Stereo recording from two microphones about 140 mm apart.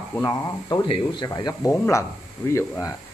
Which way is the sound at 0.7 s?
30° left (ahead or behind).